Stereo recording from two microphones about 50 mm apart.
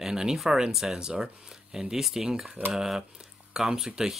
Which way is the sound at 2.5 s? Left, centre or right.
Right.